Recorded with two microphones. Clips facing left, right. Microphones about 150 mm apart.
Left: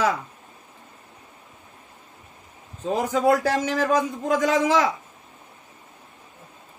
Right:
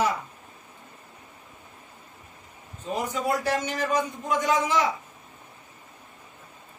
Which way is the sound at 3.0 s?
90° left.